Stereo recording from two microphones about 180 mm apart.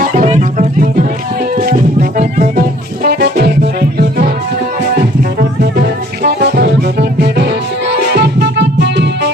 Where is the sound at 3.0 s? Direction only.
60° right (ahead or behind).